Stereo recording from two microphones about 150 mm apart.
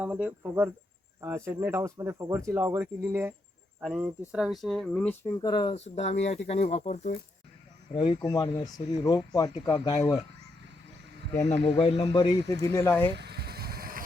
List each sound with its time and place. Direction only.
0.0 s speech: 10° right (ahead or behind); by 5.1 s 5° left (ahead or behind)
5.2 s speech: 20° left (ahead or behind)
5.7 s speech: 45° left (ahead or behind)
7.9 s speech: 35° left (ahead or behind)
11.6 s speech: 40° left (ahead or behind)
11.9 s speech: 25° left (ahead or behind)
13.1 s vehicle: 90° right